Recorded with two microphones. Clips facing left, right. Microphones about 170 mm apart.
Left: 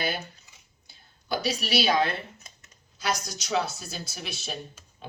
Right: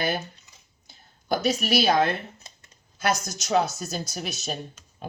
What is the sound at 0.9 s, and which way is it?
A woman's voice, 45° right (ahead or behind).